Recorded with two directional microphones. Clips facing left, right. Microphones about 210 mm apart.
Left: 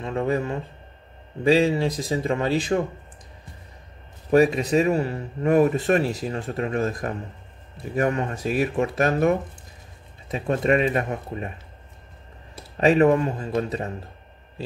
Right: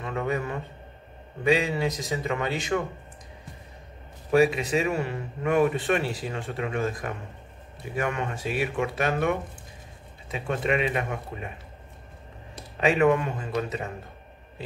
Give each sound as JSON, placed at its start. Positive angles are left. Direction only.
{"t": 0.0, "sound": "a sound", "side_deg": 30}
{"t": 1.4, "sound": "speech", "side_deg": 35}
{"t": 4.3, "sound": "speech", "side_deg": 40}
{"t": 12.8, "sound": "speech", "side_deg": 35}